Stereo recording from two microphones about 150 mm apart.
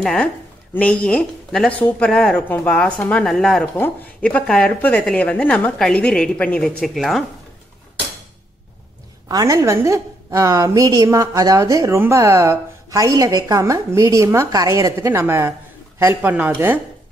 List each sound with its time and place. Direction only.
0.0 s a woman's voice: 5° left (ahead or behind)
9.3 s a woman's voice: 25° right (ahead or behind)